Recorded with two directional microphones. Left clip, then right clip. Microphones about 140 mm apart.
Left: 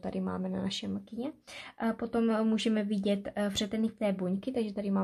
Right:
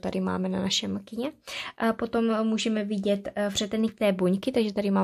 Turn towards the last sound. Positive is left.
turn(degrees=-35)  # may be behind; listen again after turning